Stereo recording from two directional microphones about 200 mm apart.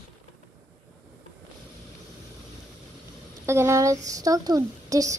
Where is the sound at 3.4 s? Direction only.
15° right (ahead or behind).